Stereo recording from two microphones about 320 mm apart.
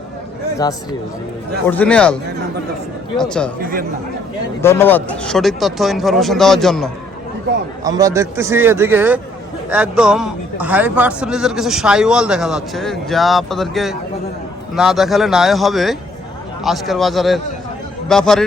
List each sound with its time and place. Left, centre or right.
1.6 s a man's voice: centre
3.2 s a man's voice: centre
3.6 s speech: right
4.6 s a man's voice: centre
7.9 s a man's voice: centre